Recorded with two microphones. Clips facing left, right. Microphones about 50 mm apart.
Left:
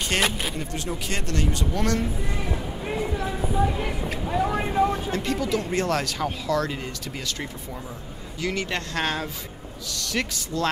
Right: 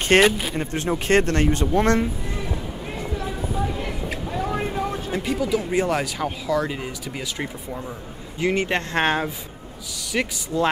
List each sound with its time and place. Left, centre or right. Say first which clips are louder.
0.2 s speech: right 7 dB; centre
0.6 s speech: right 6 dB; right
3.6 s a sound: left 4 dB; centre
5.1 s speech: right 2 dB; centre
8.4 s speech: right 6 dB; right
9.9 s speech: right 3 dB; centre